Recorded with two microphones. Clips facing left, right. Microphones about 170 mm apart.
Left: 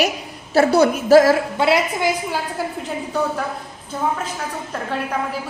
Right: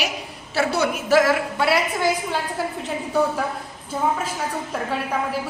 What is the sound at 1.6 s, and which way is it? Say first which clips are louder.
Speech: left 3 dB; 20° left (ahead or behind).